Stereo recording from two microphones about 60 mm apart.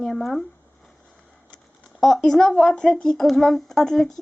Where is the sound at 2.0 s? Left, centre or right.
Centre.